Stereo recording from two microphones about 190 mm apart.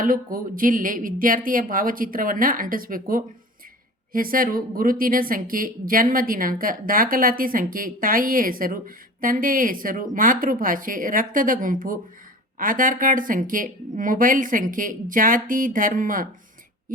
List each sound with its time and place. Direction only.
0.0 s a woman's voice: 45° right (ahead or behind)